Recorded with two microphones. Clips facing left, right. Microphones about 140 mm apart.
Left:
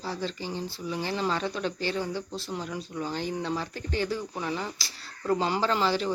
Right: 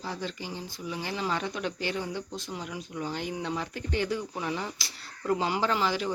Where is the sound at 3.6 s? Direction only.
20° right (ahead or behind).